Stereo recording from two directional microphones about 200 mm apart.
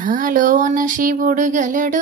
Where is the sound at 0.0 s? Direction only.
45° right (ahead or behind).